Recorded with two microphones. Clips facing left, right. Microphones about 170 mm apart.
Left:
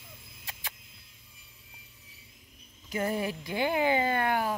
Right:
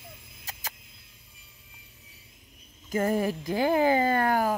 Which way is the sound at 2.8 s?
45° right (ahead or behind).